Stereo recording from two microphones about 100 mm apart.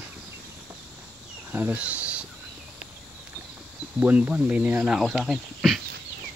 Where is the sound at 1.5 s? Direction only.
20° right (ahead or behind).